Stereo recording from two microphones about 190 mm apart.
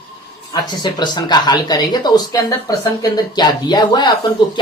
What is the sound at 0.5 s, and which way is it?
Speech, 20° left (ahead or behind).